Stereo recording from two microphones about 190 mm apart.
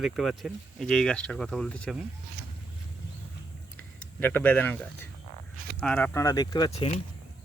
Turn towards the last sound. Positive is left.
turn(degrees=30)  # may be behind; listen again after turning